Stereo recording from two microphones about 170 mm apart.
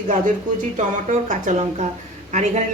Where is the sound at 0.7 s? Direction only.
50° right (ahead or behind).